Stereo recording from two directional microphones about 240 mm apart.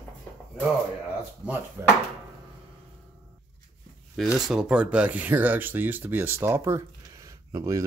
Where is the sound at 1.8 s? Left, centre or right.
Centre.